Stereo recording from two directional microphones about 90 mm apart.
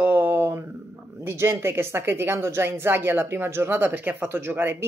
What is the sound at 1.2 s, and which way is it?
Speech, 30° right (ahead or behind).